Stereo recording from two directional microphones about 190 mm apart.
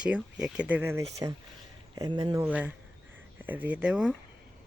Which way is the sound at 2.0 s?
25° right (ahead or behind).